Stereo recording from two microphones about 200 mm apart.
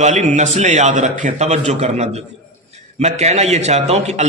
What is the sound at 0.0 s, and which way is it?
A man's voice, 35° right (ahead or behind).